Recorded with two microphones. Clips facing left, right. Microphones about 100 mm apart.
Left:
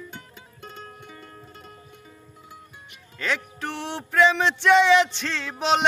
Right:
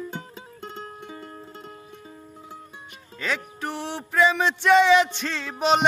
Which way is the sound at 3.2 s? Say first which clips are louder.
Left 1 dB; 10° right (ahead or behind).